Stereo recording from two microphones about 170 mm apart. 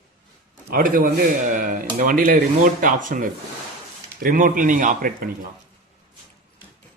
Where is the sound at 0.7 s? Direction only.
55° right (ahead or behind).